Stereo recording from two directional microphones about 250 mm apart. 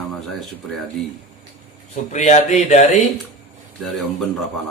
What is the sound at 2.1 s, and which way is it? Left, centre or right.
Speech, left.